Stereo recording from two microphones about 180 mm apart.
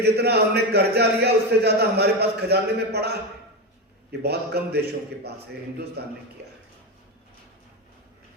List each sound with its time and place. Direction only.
0.0 s a man's voice: 65° right (ahead or behind)
4.2 s a man's voice: 65° right (ahead or behind)